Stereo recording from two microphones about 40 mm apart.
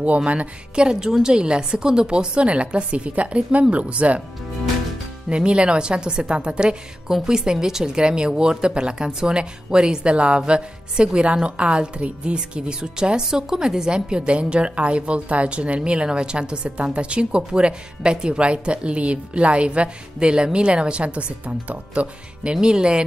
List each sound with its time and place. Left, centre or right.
0.0 s a woman's voice: right
0.8 s a woman's voice: centre; by 4.2 s right
5.3 s a woman's voice: right